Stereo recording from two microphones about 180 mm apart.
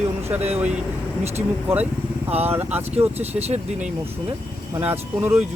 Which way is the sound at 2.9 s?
35° right (ahead or behind).